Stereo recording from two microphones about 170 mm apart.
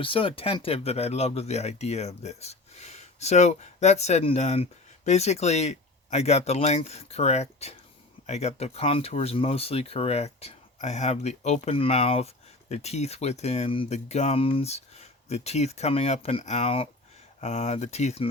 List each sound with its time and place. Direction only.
0.0 s speech: 30° left (ahead or behind)